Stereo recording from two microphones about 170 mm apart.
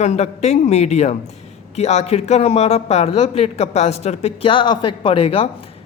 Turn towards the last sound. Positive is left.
turn(degrees=35)  # may be behind; listen again after turning